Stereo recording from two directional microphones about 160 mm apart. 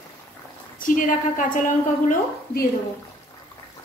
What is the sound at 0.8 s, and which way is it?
A woman's voice, 55° left (ahead or behind).